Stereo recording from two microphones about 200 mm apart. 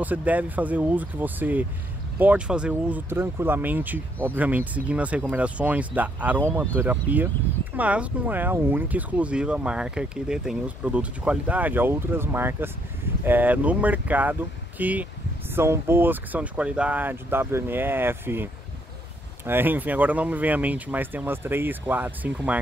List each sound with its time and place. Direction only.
0.0 s speech: 10° right (ahead or behind)